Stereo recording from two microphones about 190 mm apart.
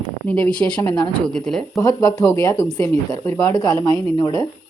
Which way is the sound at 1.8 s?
20° left (ahead or behind).